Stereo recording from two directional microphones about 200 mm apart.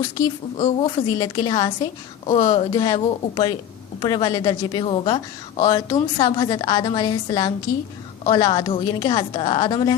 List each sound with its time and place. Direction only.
0.5 s a woman's voice: 25° left (ahead or behind)